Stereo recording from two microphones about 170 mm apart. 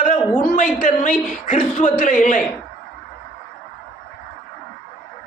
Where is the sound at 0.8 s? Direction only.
50° left (ahead or behind).